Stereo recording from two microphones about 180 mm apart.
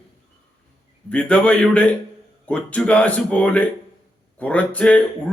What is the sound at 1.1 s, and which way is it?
A man's voice, 5° left (ahead or behind).